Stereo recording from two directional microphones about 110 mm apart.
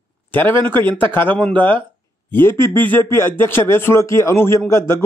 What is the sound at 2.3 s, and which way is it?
A man's voice, 20° left (ahead or behind).